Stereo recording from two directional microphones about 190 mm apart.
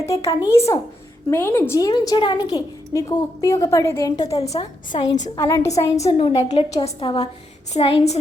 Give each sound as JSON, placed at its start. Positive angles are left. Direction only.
{"t": 0.0, "sound": "a woman's voice", "side_deg": 15}
{"t": 4.4, "sound": "a woman's voice", "side_deg": 35}
{"t": 6.1, "sound": "a woman's voice", "side_deg": 30}